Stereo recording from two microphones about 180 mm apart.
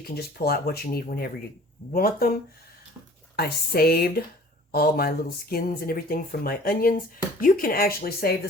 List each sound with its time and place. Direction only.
0.0 s speech: 60° left (ahead or behind)